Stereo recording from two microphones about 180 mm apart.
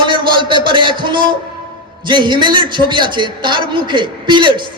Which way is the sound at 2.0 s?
25° right (ahead or behind).